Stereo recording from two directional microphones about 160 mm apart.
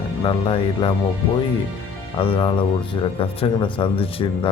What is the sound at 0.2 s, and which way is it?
Speech, 30° left (ahead or behind).